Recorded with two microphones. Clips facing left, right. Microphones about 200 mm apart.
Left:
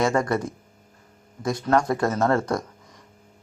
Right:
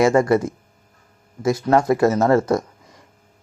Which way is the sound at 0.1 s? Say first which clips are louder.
Right 7 dB; 25° right (ahead or behind).